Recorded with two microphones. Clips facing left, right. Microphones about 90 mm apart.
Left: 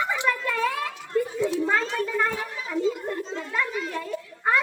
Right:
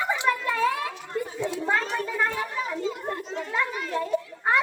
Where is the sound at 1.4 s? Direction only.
20° right (ahead or behind).